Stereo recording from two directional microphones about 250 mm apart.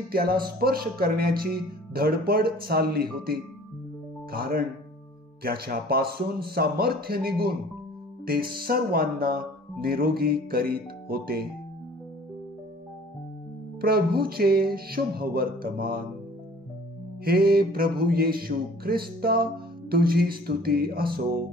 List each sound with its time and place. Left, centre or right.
0.1 s music: right
8.5 s music: right
13.7 s music: right
17.2 s music: right